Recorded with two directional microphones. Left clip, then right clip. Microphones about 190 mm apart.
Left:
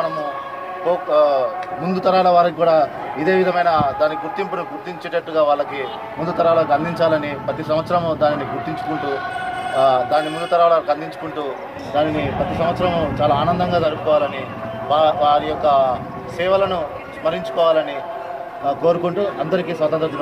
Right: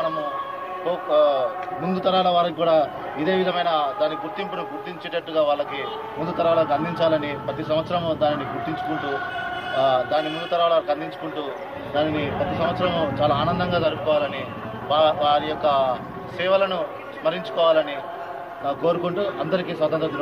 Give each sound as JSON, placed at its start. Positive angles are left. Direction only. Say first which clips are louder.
{"t": 0.8, "sound": "speech", "louder": "left 4 dB", "side_deg": 10}
{"t": 8.9, "sound": "speech", "louder": "left 5 dB", "side_deg": 60}
{"t": 9.8, "sound": "speech", "louder": "left 5 dB", "side_deg": 15}